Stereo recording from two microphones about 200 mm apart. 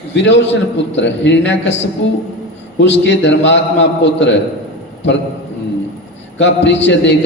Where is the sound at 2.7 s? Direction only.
60° left (ahead or behind).